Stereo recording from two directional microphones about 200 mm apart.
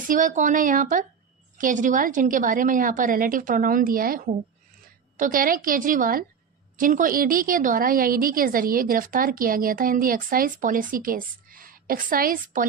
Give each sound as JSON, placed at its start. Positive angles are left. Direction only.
{"t": 0.1, "sound": "a woman's voice", "side_deg": -40}